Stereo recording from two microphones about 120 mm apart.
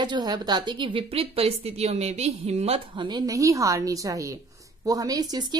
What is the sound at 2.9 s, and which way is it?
A woman's voice, 35° right (ahead or behind).